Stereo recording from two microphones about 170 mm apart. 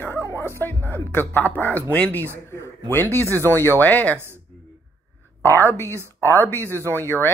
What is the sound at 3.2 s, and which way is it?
Speech, 15° right (ahead or behind).